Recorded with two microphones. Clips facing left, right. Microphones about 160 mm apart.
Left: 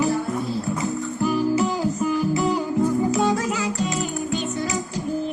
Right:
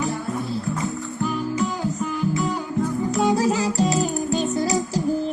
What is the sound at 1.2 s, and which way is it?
Music, 5° left (ahead or behind).